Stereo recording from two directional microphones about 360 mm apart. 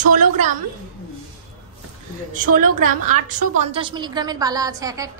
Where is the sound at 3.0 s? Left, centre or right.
Right.